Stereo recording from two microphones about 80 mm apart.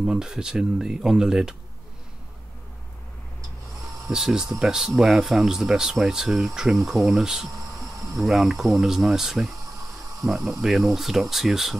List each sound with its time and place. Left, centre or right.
0.0 s speech: centre
4.1 s speech: centre
7.5 s a sound: right
8.2 s speech: centre